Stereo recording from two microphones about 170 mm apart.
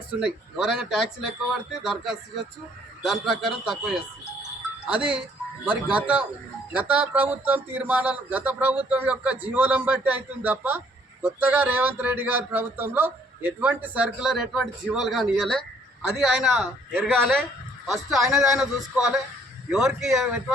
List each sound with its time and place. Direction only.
0.2 s a man's voice: 5° right (ahead or behind)